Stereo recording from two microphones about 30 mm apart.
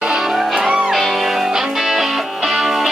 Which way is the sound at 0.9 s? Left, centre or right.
Centre.